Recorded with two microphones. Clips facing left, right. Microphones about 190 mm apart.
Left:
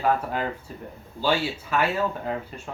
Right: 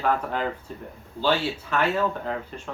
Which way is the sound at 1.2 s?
10° left (ahead or behind).